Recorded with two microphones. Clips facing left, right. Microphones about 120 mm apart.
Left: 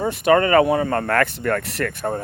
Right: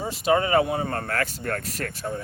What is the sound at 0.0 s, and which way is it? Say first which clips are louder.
Speech: left 6 dB; 60° left (ahead or behind).